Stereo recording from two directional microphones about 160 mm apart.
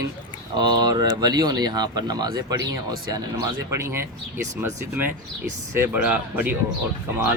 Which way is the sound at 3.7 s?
15° right (ahead or behind).